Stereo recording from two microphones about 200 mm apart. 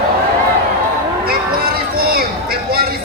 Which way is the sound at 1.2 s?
50° right (ahead or behind).